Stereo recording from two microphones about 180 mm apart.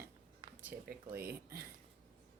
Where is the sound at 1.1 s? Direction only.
55° right (ahead or behind).